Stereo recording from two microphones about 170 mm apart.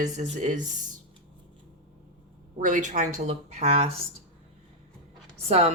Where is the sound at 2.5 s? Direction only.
45° right (ahead or behind).